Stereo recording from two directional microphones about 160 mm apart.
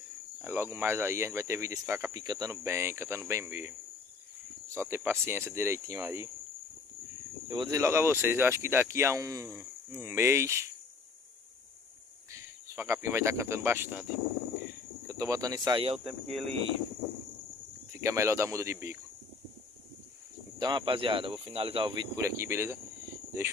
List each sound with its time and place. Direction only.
0.4 s speech: 15° right (ahead or behind)
4.7 s speech: 15° right (ahead or behind)
7.4 s speech: 25° right (ahead or behind)
12.3 s speech: 20° right (ahead or behind)
15.0 s speech: 20° right (ahead or behind)
15.8 s speech: 40° right (ahead or behind)
18.0 s speech: 20° right (ahead or behind)
20.5 s speech: 25° right (ahead or behind)
22.1 s speech: 20° right (ahead or behind)